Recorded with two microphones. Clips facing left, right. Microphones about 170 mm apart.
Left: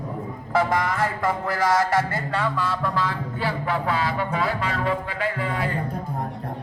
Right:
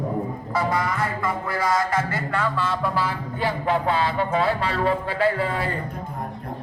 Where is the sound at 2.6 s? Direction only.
5° right (ahead or behind); by 5.7 s 35° right (ahead or behind).